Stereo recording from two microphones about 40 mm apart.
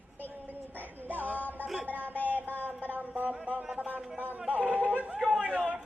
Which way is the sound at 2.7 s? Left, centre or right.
Right.